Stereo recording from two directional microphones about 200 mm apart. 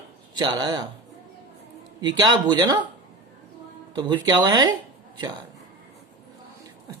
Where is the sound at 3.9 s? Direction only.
20° right (ahead or behind).